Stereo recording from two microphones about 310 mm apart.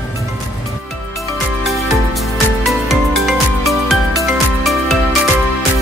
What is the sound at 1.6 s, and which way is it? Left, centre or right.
Music, centre.